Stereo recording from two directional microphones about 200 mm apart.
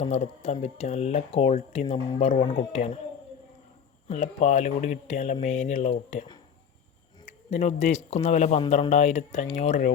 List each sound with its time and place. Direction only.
0.0 s speech: 30° left (ahead or behind)
4.1 s speech: 35° left (ahead or behind)
7.5 s speech: 35° left (ahead or behind)